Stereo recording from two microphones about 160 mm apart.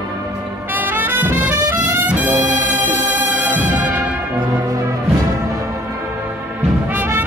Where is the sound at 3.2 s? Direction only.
50° right (ahead or behind).